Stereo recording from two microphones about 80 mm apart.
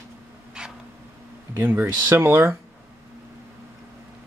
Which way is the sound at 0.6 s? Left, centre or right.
Centre.